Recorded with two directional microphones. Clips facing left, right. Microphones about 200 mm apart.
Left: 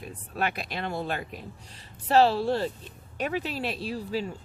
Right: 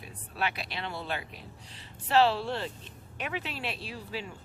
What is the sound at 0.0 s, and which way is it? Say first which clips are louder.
Speech: left 4 dB; 45° left (ahead or behind).